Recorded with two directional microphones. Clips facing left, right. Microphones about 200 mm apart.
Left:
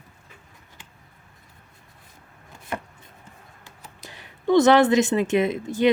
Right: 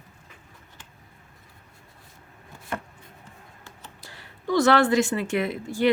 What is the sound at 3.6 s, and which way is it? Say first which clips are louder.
Speech: left 2 dB; 20° left (ahead or behind).